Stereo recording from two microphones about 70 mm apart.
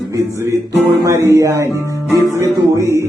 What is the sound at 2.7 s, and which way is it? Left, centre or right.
Speech, right.